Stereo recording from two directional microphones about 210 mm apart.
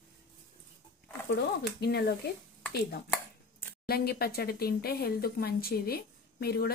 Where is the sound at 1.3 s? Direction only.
50° left (ahead or behind).